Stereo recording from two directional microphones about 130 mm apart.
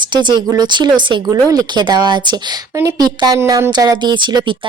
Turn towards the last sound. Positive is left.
turn(degrees=-35)  # may be behind; listen again after turning